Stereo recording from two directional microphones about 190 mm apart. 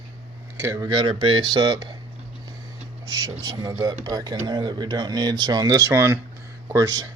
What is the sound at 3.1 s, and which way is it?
Speech, 20° right (ahead or behind).